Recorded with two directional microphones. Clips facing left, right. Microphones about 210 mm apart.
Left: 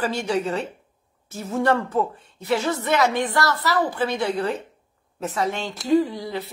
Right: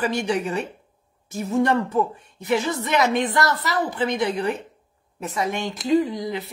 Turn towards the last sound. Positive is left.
turn(degrees=-15)  # may be behind; listen again after turning